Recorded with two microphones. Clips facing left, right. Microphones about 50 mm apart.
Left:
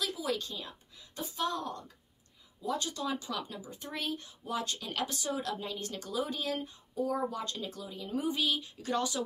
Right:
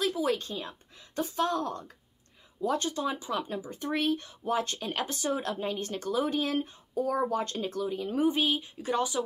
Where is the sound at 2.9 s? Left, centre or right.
Right.